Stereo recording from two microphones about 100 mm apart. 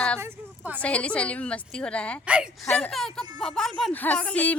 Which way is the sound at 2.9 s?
5° left (ahead or behind).